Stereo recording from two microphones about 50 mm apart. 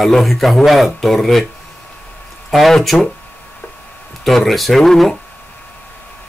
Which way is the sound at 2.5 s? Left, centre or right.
Centre.